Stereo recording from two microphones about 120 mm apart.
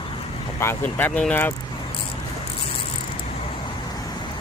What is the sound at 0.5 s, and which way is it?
Speech, 20° left (ahead or behind).